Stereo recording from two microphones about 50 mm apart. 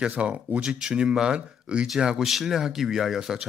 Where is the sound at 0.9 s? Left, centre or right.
Centre.